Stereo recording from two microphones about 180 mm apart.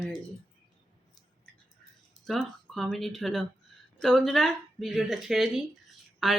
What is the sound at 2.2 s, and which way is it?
Speech, centre (ahead or behind).